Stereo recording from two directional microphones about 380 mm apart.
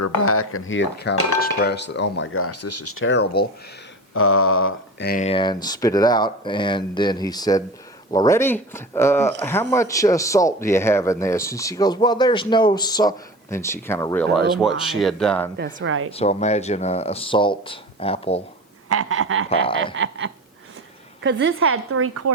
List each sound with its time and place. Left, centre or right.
0.2 s speech: left; by 15.4 s centre
15.5 s speech: right
16.1 s speech: centre
18.9 s speech: right